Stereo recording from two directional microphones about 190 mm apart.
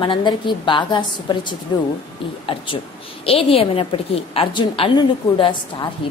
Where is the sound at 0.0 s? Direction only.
25° left (ahead or behind).